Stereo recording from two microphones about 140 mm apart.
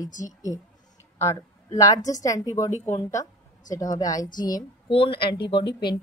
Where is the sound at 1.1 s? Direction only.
20° left (ahead or behind).